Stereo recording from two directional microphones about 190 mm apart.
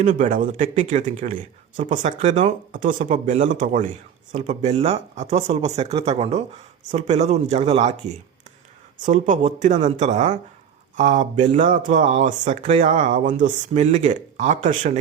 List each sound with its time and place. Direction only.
0.0 s speech: 45° right (ahead or behind)
9.0 s speech: 40° right (ahead or behind)